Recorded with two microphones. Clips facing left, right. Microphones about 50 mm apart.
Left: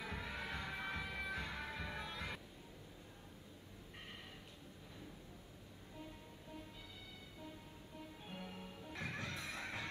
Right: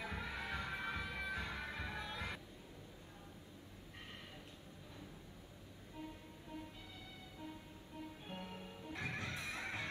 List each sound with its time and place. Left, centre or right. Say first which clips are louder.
0.0 s music: right 1 dB; centre
8.3 s music: right 1 dB; centre
9.1 s music: right 1 dB; right